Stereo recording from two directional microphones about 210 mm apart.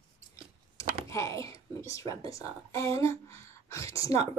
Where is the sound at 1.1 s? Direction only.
15° left (ahead or behind).